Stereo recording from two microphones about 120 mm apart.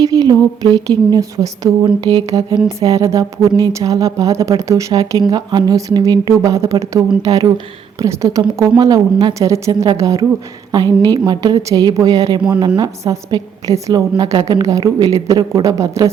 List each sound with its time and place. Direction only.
0.0 s a woman's voice: 30° right (ahead or behind)
5.3 s a woman's voice: 35° right (ahead or behind)